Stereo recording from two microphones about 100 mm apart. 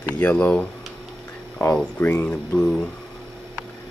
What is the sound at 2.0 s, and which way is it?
Speech, 20° left (ahead or behind).